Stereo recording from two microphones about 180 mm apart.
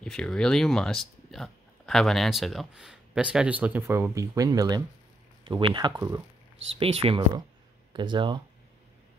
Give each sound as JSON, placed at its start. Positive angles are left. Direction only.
{"t": 0.0, "sound": "speech", "side_deg": 5}
{"t": 6.8, "sound": "speech", "side_deg": -35}